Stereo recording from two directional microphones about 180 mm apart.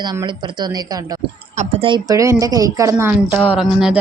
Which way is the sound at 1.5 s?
40° right (ahead or behind).